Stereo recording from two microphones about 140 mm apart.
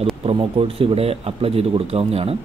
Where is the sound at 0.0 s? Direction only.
40° right (ahead or behind).